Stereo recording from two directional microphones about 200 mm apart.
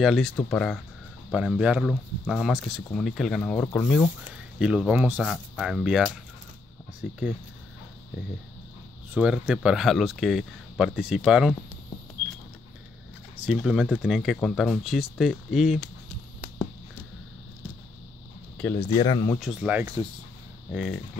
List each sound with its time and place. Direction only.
0.0 s speech: centre (ahead or behind)
4.3 s speech: 5° right (ahead or behind)
9.1 s speech: 5° right (ahead or behind)
13.5 s speech: 5° right (ahead or behind)
18.6 s speech: 10° left (ahead or behind)
18.9 s speech: 20° left (ahead or behind)
19.4 s speech: 5° right (ahead or behind)